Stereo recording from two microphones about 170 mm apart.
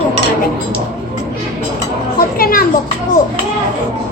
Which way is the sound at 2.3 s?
60° left (ahead or behind).